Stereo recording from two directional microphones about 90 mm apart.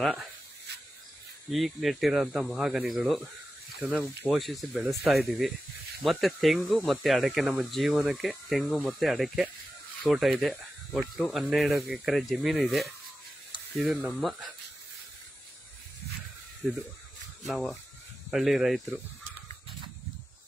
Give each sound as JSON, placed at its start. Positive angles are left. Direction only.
{"t": 1.5, "sound": "speech", "side_deg": 0}
{"t": 3.8, "sound": "speech", "side_deg": -20}
{"t": 4.3, "sound": "speech", "side_deg": 0}
{"t": 16.6, "sound": "speech", "side_deg": 0}